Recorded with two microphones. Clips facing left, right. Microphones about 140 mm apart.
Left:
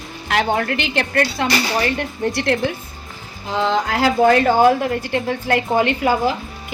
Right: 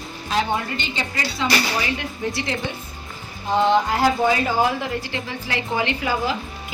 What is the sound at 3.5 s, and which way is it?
Speech, 90° left.